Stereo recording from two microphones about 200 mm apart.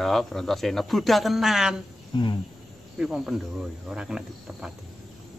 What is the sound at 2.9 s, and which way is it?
A man's voice, 5° right (ahead or behind).